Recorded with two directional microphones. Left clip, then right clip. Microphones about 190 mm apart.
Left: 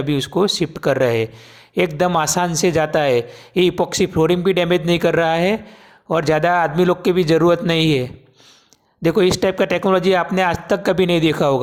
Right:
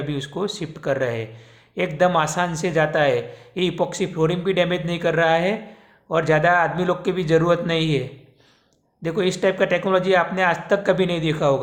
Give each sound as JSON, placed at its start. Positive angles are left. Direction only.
{"t": 0.0, "sound": "speech", "side_deg": 40}